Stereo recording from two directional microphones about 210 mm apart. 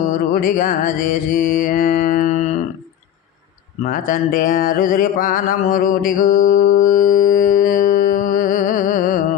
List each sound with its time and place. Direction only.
0.3 s mantra: 40° left (ahead or behind)
3.8 s mantra: 40° left (ahead or behind)